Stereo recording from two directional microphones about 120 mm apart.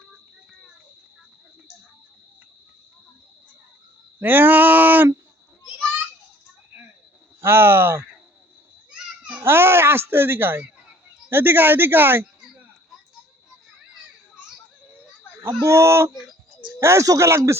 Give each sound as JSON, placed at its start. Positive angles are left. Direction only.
{"t": 4.2, "sound": "a sound", "side_deg": -15}
{"t": 7.4, "sound": "speech", "side_deg": -20}
{"t": 9.4, "sound": "speech", "side_deg": -20}
{"t": 15.6, "sound": "speech", "side_deg": -25}
{"t": 16.1, "sound": "a sound", "side_deg": 0}
{"t": 16.8, "sound": "speech", "side_deg": -25}